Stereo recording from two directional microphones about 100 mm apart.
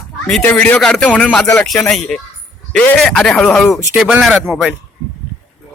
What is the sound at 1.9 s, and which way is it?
Speech, 5° left (ahead or behind).